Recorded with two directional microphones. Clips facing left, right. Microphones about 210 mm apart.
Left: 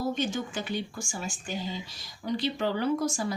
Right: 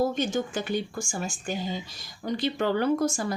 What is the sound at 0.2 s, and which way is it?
A woman's voice, 45° right (ahead or behind).